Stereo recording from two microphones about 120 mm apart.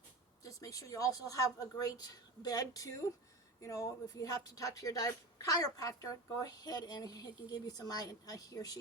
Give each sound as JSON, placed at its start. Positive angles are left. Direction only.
{"t": 0.4, "sound": "a woman's voice", "side_deg": 30}